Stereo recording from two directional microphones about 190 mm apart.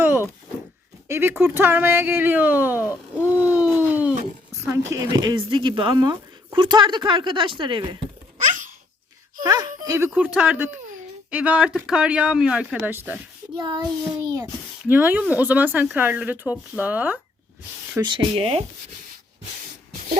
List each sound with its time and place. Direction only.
0.0 s a sound: 10° right (ahead or behind)
1.0 s speech: 10° right (ahead or behind)
3.3 s a sound: 10° right (ahead or behind)
4.6 s speech: 15° right (ahead or behind)
9.4 s a sound: 20° right (ahead or behind)
10.2 s speech: 5° right (ahead or behind)
13.6 s speech: 20° right (ahead or behind)
14.8 s speech: 10° right (ahead or behind)
18.0 s speech: 25° right (ahead or behind)